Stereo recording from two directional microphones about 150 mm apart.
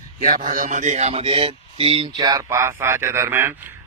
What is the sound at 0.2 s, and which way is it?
A man's voice, 65° right (ahead or behind).